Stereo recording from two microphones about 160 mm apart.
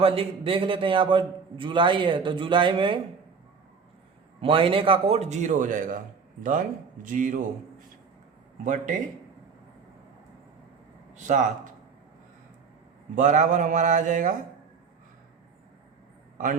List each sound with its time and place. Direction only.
0.0 s a man's voice: 35° right (ahead or behind)
4.4 s a man's voice: 35° right (ahead or behind); by 7.4 s 55° right (ahead or behind)
8.6 s speech: 55° right (ahead or behind)
11.1 s speech: 50° right (ahead or behind)
13.1 s speech: 50° right (ahead or behind)